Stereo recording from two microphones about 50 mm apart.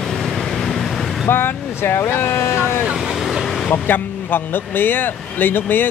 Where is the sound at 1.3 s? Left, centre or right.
Left.